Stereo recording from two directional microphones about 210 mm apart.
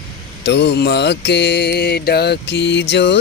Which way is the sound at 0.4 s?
55° left (ahead or behind).